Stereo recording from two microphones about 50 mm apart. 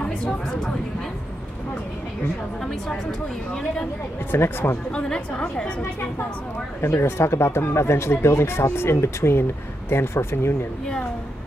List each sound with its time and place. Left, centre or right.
4.3 s speech: left
4.9 s a woman's voice: centre
6.9 s speech: left